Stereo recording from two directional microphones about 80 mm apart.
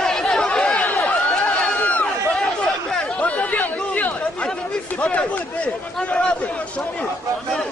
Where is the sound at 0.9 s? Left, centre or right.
Centre.